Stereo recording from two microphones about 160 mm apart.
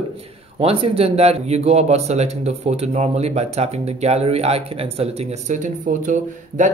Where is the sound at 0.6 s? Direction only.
40° right (ahead or behind).